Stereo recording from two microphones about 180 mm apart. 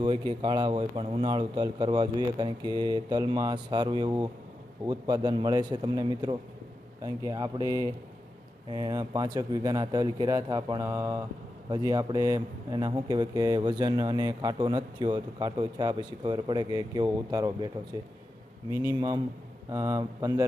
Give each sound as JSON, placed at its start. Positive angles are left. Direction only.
{"t": 0.0, "sound": "a man's voice", "side_deg": -30}
{"t": 18.8, "sound": "a man's voice", "side_deg": -20}